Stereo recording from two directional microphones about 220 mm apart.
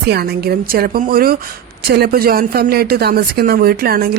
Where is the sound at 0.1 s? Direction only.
45° right (ahead or behind).